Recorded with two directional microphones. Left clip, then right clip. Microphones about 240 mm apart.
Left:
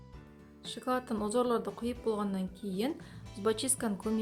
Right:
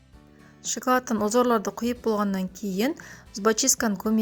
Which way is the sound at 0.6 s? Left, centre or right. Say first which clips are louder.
Right 10 dB; right.